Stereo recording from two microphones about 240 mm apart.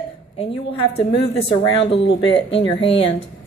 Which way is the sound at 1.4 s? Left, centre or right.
Left.